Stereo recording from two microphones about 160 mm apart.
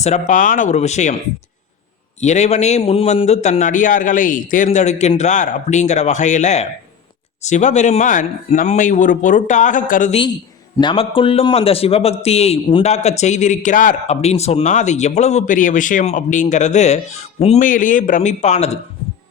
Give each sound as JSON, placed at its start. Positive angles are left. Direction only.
{"t": 0.0, "sound": "a man's voice", "side_deg": 50}
{"t": 2.2, "sound": "a man's voice", "side_deg": 45}
{"t": 10.1, "sound": "a woman's voice", "side_deg": 35}
{"t": 17.6, "sound": "a man's voice", "side_deg": 55}